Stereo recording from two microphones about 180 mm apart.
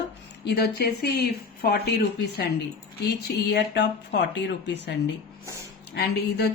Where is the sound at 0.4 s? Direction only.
60° left (ahead or behind).